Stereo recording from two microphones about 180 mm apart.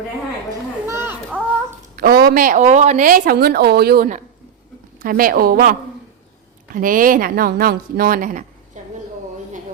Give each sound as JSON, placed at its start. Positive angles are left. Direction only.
{"t": 0.9, "sound": "a sound", "side_deg": -15}
{"t": 2.0, "sound": "speech", "side_deg": -55}
{"t": 6.7, "sound": "speech", "side_deg": -50}